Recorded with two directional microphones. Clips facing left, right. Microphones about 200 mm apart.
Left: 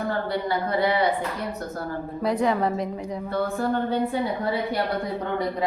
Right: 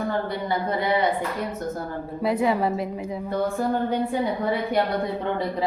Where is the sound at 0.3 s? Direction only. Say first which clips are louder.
Left 1 dB; 20° right (ahead or behind).